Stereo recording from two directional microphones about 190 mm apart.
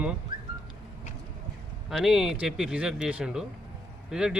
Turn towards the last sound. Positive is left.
turn(degrees=-5)  # may be behind; listen again after turning